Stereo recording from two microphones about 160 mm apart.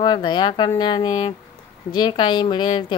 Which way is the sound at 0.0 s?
30° left (ahead or behind).